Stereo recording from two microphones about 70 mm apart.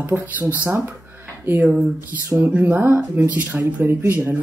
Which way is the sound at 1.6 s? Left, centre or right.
Centre.